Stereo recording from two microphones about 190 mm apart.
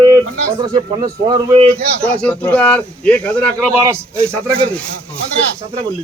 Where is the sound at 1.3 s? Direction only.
30° right (ahead or behind).